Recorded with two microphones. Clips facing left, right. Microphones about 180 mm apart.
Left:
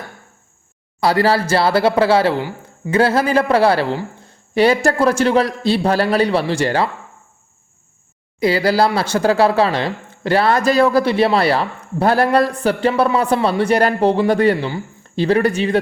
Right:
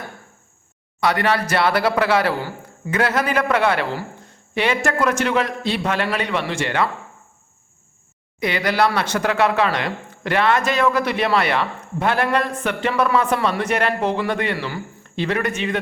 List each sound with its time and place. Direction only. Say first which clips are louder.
0.9 s speech: left 4 dB; 30° left (ahead or behind)
8.4 s speech: left 5 dB; 30° left (ahead or behind)